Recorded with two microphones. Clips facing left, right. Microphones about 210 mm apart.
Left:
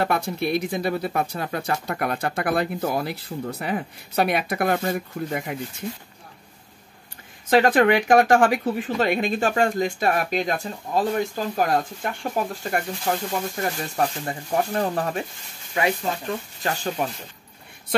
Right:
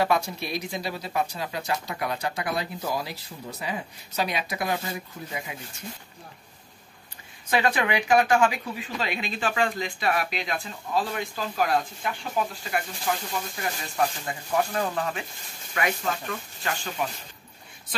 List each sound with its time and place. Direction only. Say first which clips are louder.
0.0 s speech: left 2 dB; 55° left (ahead or behind)
7.4 s speech: left 8 dB; 50° left (ahead or behind)